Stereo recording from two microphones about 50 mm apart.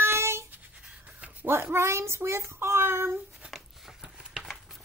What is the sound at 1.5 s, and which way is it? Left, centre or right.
A child's voice, right.